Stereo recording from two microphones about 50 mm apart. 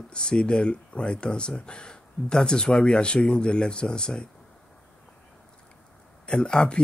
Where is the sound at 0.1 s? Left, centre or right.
Centre.